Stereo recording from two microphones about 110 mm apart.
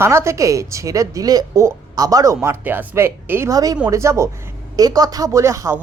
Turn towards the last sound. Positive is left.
turn(degrees=-30)  # may be behind; listen again after turning